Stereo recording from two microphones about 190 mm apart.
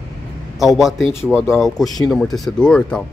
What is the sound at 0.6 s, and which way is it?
Speech, centre (ahead or behind).